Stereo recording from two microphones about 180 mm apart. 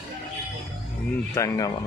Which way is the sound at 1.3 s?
20° left (ahead or behind).